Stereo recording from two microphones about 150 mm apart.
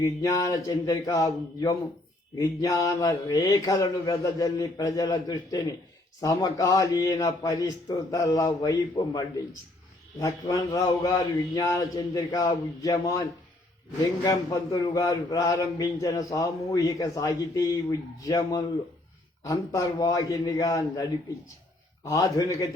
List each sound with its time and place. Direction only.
0.0 s a man's voice: 20° left (ahead or behind)
9.0 s a man's voice: 40° left (ahead or behind)
10.2 s a man's voice: 20° left (ahead or behind)